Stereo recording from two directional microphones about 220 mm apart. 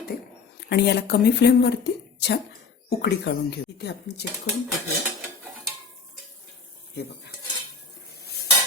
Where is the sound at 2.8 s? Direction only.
50° left (ahead or behind).